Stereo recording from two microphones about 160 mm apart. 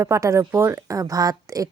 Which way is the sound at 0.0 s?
20° right (ahead or behind).